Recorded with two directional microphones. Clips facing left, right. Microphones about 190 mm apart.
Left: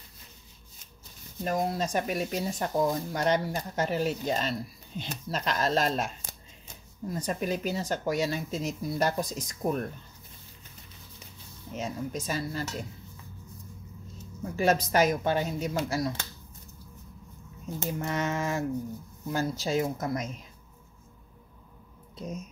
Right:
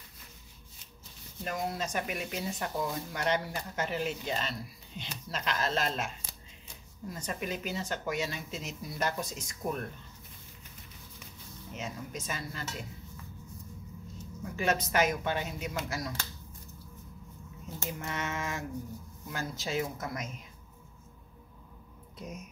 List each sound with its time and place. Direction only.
1.4 s speech: 35° left (ahead or behind)
11.7 s speech: 35° left (ahead or behind)
14.4 s speech: 35° left (ahead or behind)
17.9 s speech: 35° left (ahead or behind)